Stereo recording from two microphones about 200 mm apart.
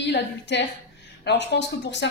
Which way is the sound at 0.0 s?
60° left (ahead or behind).